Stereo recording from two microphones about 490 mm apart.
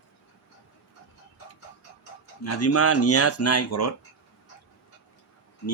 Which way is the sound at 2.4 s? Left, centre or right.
Left.